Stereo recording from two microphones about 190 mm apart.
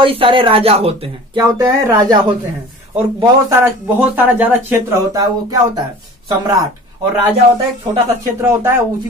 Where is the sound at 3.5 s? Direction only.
10° right (ahead or behind).